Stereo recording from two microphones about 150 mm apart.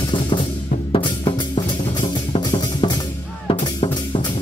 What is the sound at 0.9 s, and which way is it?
Music, 35° left (ahead or behind).